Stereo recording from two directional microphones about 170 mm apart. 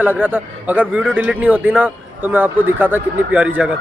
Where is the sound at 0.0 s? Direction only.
10° right (ahead or behind).